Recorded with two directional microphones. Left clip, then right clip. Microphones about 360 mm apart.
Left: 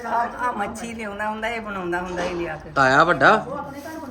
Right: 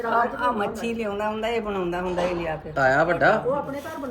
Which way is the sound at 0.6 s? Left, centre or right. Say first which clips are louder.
Right 2 dB; left.